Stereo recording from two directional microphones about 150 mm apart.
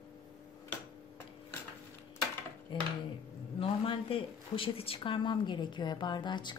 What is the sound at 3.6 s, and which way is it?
Speech, 35° left (ahead or behind).